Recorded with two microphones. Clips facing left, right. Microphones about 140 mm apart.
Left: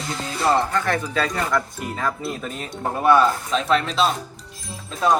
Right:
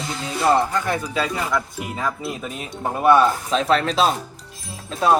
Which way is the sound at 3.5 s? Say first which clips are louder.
Right 2 dB; 35° right (ahead or behind).